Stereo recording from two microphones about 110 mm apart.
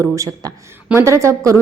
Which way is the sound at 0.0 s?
30° right (ahead or behind).